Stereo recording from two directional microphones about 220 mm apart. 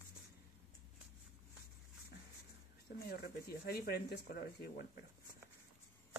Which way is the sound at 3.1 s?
45° left (ahead or behind).